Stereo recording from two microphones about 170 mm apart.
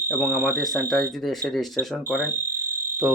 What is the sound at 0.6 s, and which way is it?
Speech, centre (ahead or behind).